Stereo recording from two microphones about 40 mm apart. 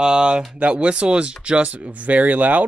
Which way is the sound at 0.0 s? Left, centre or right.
Right.